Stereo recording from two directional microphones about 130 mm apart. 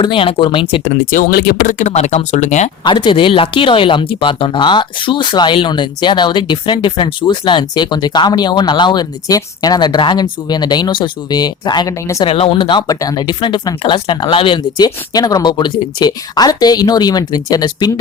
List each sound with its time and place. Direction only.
0.0 s speech: 40° left (ahead or behind)
1.1 s speech: 90° left
1.9 s speech: 65° left (ahead or behind)
2.8 s speech: 35° left (ahead or behind)
12.2 s speech: 45° left (ahead or behind)
14.8 s speech: 30° left (ahead or behind)